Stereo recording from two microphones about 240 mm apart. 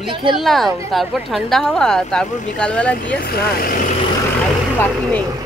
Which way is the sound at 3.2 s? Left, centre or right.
Left.